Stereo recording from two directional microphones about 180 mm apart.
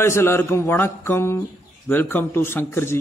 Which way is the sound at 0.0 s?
15° left (ahead or behind).